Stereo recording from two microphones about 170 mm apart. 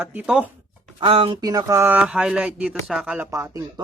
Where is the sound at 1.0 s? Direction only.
30° right (ahead or behind); by 3.3 s 10° right (ahead or behind).